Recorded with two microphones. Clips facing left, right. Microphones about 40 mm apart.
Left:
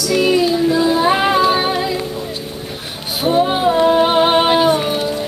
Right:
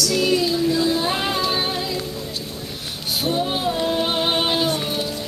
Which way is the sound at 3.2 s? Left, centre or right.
Centre.